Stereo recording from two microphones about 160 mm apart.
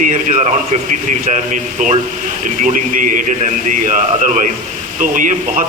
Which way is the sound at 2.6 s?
55° right (ahead or behind).